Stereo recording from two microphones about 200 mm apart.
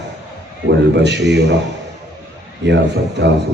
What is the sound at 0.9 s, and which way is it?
Speech, 60° right (ahead or behind).